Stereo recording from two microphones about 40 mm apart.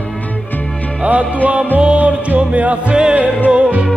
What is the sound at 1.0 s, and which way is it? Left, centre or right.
Music, right.